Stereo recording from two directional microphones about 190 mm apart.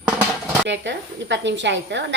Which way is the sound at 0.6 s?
70° right (ahead or behind).